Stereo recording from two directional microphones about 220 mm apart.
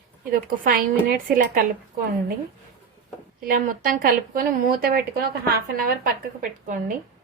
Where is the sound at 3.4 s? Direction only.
40° right (ahead or behind).